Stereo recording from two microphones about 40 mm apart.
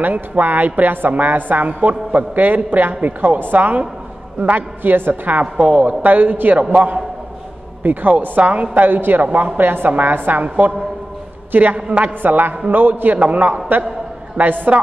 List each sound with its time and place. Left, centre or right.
0.0 s a woman's voice: right
4.4 s a man's voice: right
4.8 s a woman's voice: right
11.5 s a man's voice: right
12.2 s a woman's voice: right
13.2 s a man's voice: right